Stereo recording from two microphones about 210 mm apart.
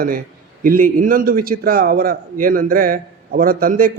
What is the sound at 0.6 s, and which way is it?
A man's voice, 40° right (ahead or behind).